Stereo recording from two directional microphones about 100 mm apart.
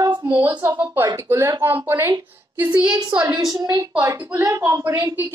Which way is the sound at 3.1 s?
10° right (ahead or behind).